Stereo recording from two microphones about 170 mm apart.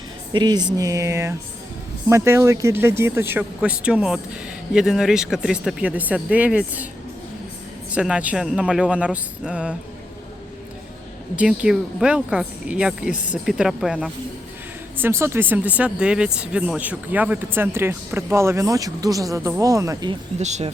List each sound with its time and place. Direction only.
0.3 s speech: 25° right (ahead or behind); by 6.8 s 10° right (ahead or behind)
7.9 s speech: 5° right (ahead or behind)
11.3 s speech: 5° right (ahead or behind)
14.9 s speech: 15° right (ahead or behind)
20.4 s speech: 40° right (ahead or behind)